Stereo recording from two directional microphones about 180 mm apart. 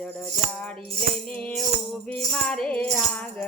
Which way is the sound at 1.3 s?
5° left (ahead or behind).